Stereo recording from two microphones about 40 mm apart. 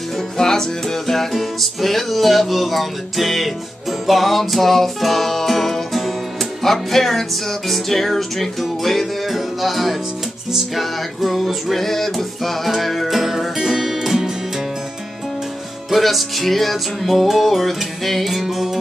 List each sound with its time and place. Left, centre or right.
0.4 s music: centre
15.9 s music: centre